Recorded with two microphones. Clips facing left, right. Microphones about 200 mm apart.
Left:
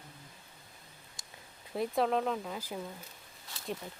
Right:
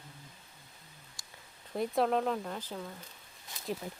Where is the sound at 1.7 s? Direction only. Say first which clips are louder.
Right 1 dB; centre (ahead or behind).